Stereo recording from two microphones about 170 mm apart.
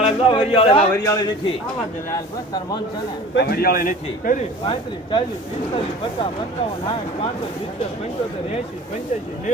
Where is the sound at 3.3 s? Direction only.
70° left (ahead or behind); by 4.3 s 55° left (ahead or behind).